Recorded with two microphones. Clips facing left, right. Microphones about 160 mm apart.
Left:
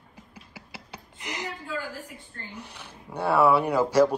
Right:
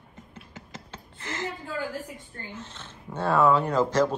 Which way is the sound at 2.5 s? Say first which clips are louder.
Even; 15° left (ahead or behind).